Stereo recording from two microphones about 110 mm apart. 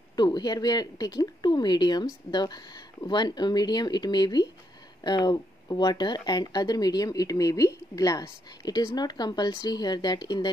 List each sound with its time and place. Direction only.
0.1 s speech: 40° left (ahead or behind)